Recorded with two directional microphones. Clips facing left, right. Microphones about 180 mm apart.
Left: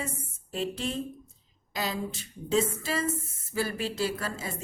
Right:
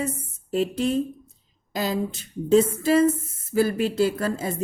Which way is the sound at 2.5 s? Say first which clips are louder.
Right 10 dB; 45° right (ahead or behind).